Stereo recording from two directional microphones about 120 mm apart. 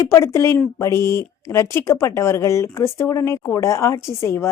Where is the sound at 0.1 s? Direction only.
25° left (ahead or behind).